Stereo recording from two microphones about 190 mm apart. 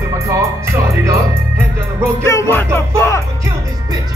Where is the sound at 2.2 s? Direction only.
15° left (ahead or behind).